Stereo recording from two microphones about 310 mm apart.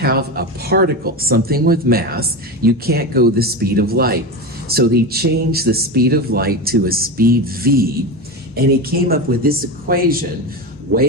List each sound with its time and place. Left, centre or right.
0.0 s speech: right